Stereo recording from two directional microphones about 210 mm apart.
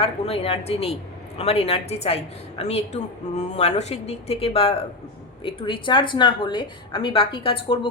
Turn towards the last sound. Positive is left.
turn(degrees=25)  # may be behind; listen again after turning